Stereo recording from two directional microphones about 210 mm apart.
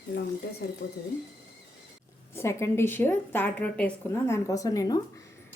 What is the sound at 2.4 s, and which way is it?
A woman's voice, 15° left (ahead or behind).